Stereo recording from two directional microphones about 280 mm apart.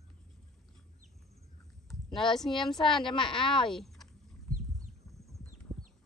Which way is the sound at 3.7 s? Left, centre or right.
Centre.